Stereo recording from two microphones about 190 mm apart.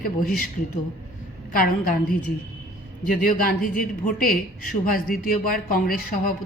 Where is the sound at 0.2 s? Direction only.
50° left (ahead or behind).